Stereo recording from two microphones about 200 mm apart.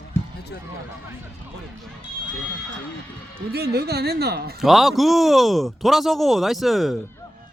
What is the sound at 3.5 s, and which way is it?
Speech, 55° right (ahead or behind).